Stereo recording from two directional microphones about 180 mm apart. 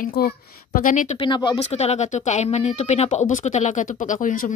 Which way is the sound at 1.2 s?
25° left (ahead or behind).